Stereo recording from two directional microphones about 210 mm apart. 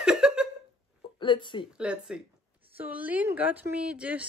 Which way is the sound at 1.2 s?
25° left (ahead or behind).